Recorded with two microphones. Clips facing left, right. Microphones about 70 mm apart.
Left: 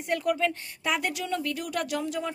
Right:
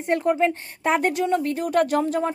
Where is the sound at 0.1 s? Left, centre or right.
Right.